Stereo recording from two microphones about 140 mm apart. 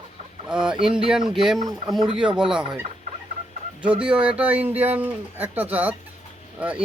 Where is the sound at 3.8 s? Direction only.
10° right (ahead or behind).